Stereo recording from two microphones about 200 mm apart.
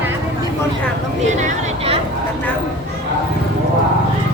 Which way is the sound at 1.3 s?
35° right (ahead or behind).